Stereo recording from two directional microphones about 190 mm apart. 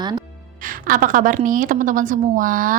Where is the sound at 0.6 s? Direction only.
45° right (ahead or behind).